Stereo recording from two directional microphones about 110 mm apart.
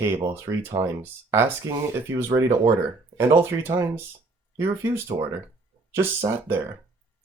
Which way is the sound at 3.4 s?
20° right (ahead or behind).